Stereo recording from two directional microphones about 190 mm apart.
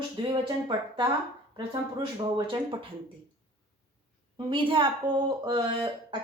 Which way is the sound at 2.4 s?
25° right (ahead or behind).